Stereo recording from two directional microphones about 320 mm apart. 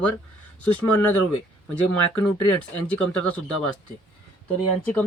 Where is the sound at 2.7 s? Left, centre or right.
Centre.